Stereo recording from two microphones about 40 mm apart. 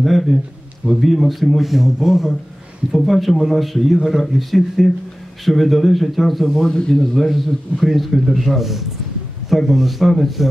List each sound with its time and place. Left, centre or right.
0.0 s speech: centre
6.7 s speech: centre
7.2 s speech: centre